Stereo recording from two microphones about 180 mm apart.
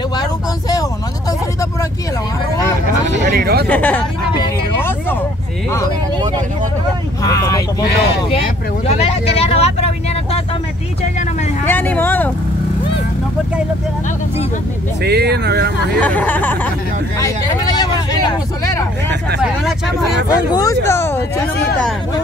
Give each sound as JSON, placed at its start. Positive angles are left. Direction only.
{"t": 0.2, "sound": "vehicle", "side_deg": 20}
{"t": 3.1, "sound": "speech", "side_deg": -55}
{"t": 3.6, "sound": "speech", "side_deg": 10}
{"t": 7.2, "sound": "vehicle", "side_deg": 20}
{"t": 8.3, "sound": "vehicle", "side_deg": 35}
{"t": 11.6, "sound": "vehicle", "side_deg": 10}
{"t": 15.0, "sound": "speech", "side_deg": -65}
{"t": 16.0, "sound": "speech", "side_deg": 10}
{"t": 17.2, "sound": "vehicle", "side_deg": 20}
{"t": 20.2, "sound": "speech", "side_deg": 20}